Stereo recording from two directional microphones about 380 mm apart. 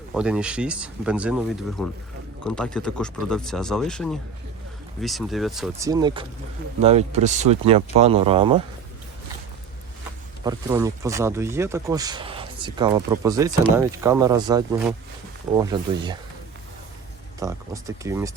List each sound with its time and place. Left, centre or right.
0.1 s speech: centre
10.4 s speech: centre
17.4 s speech: centre